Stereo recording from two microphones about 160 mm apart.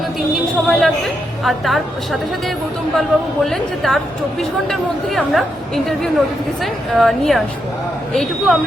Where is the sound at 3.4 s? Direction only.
Centre (ahead or behind).